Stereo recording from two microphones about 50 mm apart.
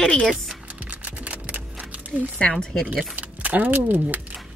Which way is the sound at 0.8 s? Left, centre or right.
Right.